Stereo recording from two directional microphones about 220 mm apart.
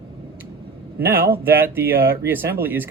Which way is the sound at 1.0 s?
10° right (ahead or behind).